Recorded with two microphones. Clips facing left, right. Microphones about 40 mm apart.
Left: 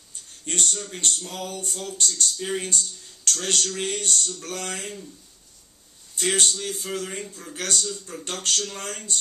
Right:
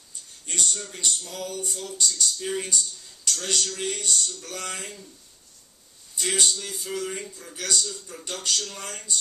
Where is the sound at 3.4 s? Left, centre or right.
Left.